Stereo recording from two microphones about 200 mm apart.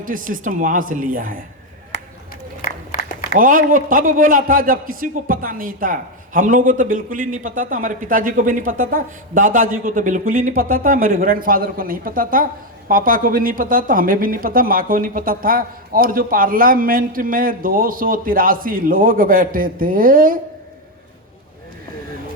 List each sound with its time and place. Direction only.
0.0 s a man's voice: 45° right (ahead or behind)
2.6 s applause: 45° left (ahead or behind)
3.3 s a man's voice: 45° right (ahead or behind)